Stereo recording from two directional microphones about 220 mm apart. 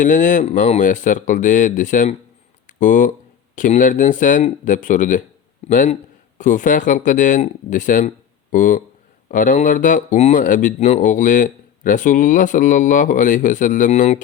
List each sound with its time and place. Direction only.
0.0 s speech: 35° left (ahead or behind)